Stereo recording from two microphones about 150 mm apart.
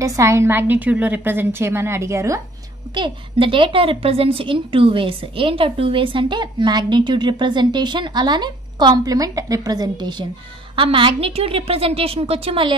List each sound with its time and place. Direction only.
0.0 s a woman's voice: 20° right (ahead or behind)
2.9 s a woman's voice: 35° right (ahead or behind)